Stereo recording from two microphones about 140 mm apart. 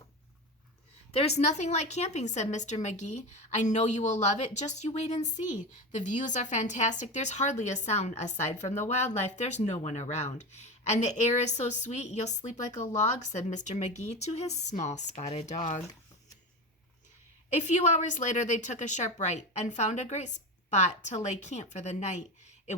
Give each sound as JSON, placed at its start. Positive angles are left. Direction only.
{"t": 1.1, "sound": "a woman's voice", "side_deg": 50}
{"t": 17.5, "sound": "a woman's voice", "side_deg": 55}